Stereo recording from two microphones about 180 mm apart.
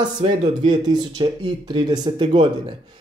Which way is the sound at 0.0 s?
30° right (ahead or behind).